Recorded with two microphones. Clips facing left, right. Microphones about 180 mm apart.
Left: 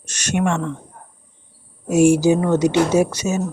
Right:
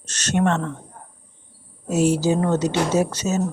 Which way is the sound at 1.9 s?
10° left (ahead or behind).